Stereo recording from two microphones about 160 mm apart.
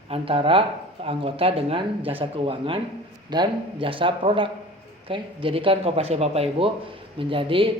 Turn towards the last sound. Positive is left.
turn(degrees=-35)  # may be behind; listen again after turning